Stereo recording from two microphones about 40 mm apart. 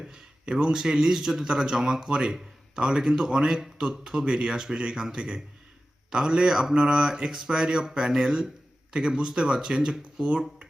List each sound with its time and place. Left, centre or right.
0.1 s speech: right